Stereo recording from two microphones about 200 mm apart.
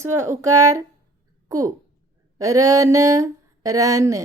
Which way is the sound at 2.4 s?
15° right (ahead or behind).